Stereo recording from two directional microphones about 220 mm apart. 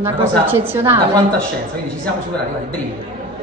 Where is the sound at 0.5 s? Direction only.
10° right (ahead or behind).